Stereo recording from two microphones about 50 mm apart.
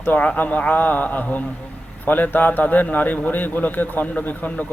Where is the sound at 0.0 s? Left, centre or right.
Left.